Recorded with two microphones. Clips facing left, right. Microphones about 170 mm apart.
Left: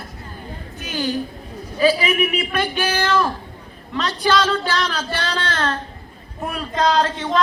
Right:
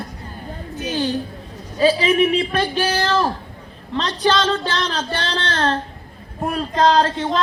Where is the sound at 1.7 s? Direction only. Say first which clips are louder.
Right 2 dB; 30° right (ahead or behind).